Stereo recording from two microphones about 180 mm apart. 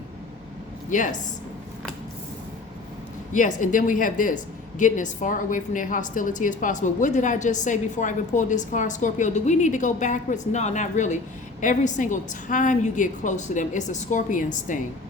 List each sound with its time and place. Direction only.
0.9 s a woman's voice: 45° left (ahead or behind)
3.3 s a woman's voice: 45° left (ahead or behind)